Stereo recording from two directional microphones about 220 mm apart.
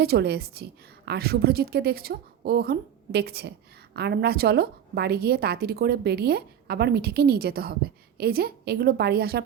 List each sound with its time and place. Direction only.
0.0 s a woman's voice: 45° right (ahead or behind)